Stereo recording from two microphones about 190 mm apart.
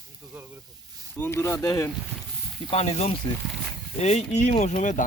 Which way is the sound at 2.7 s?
35° left (ahead or behind).